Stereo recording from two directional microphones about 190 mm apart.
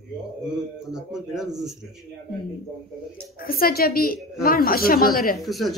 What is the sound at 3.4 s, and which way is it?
Speech, 50° left (ahead or behind).